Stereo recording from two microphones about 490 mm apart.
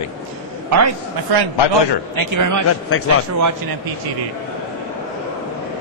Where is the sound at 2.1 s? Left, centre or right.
Right.